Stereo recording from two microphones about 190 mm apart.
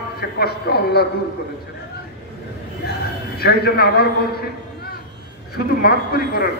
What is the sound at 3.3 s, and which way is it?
A man's voice, 55° left (ahead or behind).